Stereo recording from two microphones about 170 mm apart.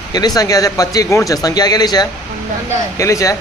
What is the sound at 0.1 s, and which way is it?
Speech, 25° left (ahead or behind).